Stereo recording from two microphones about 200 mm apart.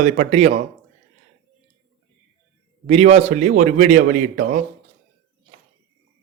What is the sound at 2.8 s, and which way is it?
A man's voice, 35° right (ahead or behind).